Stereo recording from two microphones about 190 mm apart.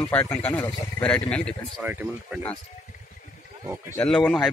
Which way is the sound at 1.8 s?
10° right (ahead or behind).